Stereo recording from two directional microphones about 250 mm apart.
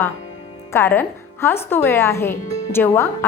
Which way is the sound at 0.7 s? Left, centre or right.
Centre.